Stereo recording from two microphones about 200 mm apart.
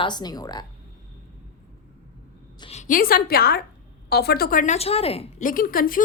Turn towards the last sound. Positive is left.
turn(degrees=45)  # may be behind; listen again after turning